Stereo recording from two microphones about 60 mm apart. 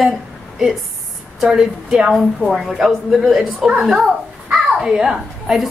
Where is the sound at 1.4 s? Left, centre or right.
Centre.